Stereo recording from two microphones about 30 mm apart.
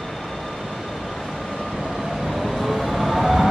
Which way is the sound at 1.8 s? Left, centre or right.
Centre.